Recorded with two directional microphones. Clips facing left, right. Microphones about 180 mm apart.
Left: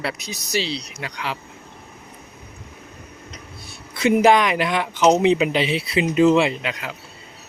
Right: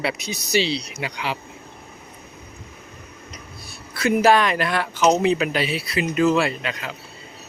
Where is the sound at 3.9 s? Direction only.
20° left (ahead or behind).